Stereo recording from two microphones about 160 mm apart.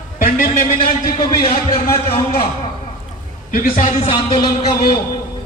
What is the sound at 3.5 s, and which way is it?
Speech, 55° left (ahead or behind).